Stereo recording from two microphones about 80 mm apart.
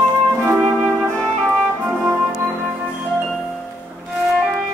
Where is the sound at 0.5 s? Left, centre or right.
Right.